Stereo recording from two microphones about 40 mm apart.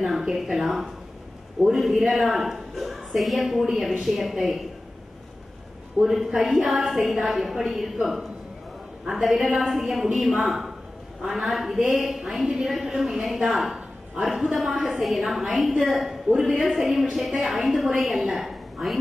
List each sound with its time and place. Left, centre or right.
0.3 s a woman's voice: centre
6.0 s a woman's voice: centre
13.7 s a sound: right
14.2 s a woman's voice: centre